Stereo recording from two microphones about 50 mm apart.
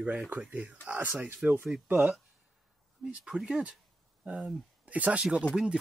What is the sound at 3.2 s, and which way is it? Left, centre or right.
Speech, centre.